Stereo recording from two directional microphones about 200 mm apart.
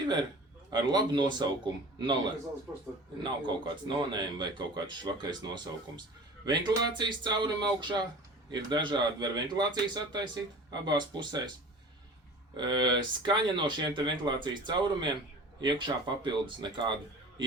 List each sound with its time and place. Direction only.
0.0 s a man's voice: 20° right (ahead or behind)
3.2 s speech: 25° right (ahead or behind)
12.5 s speech: 20° right (ahead or behind)